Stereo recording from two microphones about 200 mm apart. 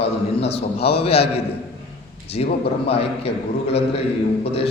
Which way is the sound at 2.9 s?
30° left (ahead or behind).